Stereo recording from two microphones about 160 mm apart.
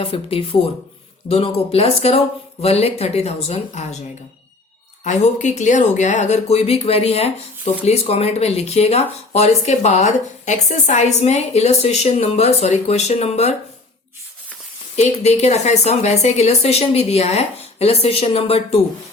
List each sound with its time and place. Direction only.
0.0 s a woman's voice: 35° left (ahead or behind)
5.0 s a woman's voice: 45° left (ahead or behind)
15.2 s a woman's voice: 40° left (ahead or behind)